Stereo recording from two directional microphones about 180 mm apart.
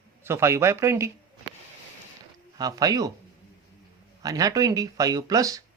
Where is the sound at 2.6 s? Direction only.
20° right (ahead or behind).